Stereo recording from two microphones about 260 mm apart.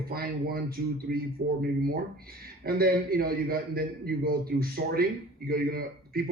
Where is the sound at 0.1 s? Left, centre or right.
Right.